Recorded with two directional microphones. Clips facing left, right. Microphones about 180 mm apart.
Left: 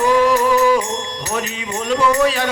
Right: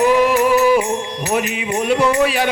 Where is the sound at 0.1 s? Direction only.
15° right (ahead or behind).